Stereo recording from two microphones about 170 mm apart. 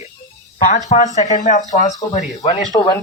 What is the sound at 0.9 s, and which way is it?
Speech, 45° left (ahead or behind).